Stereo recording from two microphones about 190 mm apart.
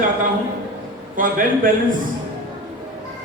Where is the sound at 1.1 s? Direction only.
45° right (ahead or behind).